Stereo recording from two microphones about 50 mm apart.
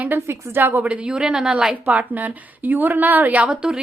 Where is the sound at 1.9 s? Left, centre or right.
Right.